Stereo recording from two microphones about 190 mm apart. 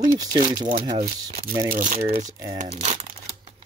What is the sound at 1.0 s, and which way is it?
Speech, 45° right (ahead or behind).